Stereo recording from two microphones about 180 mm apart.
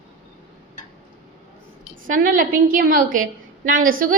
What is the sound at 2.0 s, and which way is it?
A woman's voice, 50° right (ahead or behind).